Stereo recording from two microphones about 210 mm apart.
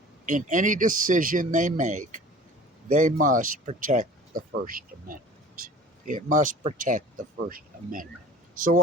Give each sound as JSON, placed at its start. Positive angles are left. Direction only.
{"t": 0.3, "sound": "speech", "side_deg": -35}